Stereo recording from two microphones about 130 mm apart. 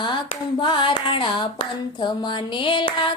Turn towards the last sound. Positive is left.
turn(degrees=40)  # may be behind; listen again after turning